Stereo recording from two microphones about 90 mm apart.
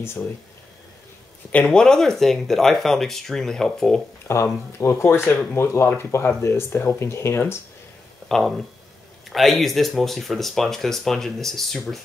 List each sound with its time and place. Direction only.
1.5 s speech: 10° left (ahead or behind)
4.3 s speech: 30° left (ahead or behind)
8.3 s speech: centre (ahead or behind)